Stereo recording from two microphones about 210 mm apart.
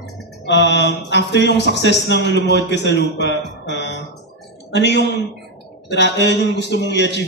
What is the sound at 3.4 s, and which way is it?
Music, 55° left (ahead or behind).